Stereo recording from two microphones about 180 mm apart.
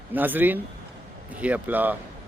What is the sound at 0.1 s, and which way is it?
Speech, 10° right (ahead or behind).